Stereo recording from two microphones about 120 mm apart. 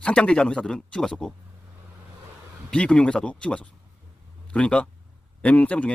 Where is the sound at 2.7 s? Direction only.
10° left (ahead or behind).